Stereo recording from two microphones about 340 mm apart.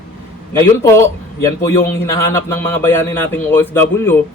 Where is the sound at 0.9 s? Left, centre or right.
Centre.